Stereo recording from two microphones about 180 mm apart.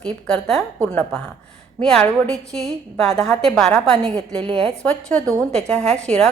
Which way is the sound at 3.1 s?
35° right (ahead or behind).